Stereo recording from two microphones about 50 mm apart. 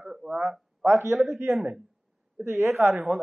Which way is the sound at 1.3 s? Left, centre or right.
Right.